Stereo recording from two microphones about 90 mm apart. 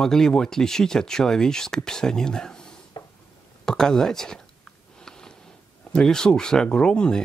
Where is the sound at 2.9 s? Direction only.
60° left (ahead or behind).